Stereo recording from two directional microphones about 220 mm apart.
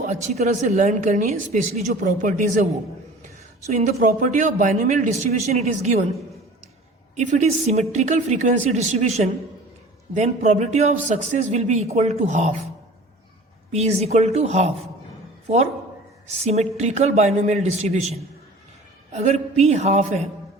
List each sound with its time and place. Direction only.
0.0 s a man's voice: 35° right (ahead or behind)
3.7 s a man's voice: 35° right (ahead or behind)
7.2 s a man's voice: 30° right (ahead or behind)
13.7 s a woman's voice: 30° right (ahead or behind)
16.2 s a man's voice: 30° right (ahead or behind)